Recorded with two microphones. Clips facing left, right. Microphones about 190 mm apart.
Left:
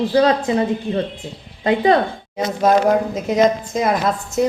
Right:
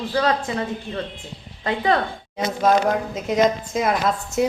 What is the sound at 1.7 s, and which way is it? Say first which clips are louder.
Speech: left 6 dB; 15° left (ahead or behind).